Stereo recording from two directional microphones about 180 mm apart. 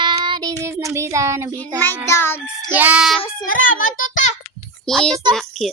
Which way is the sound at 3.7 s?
50° left (ahead or behind).